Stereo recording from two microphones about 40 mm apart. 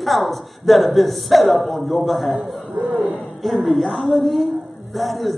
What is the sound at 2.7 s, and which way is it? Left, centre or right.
Speech, right.